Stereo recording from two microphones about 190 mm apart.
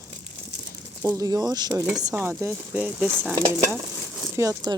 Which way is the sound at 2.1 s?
10° right (ahead or behind).